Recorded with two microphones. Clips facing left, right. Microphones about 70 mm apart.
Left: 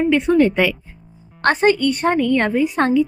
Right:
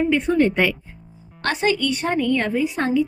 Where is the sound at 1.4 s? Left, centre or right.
Left.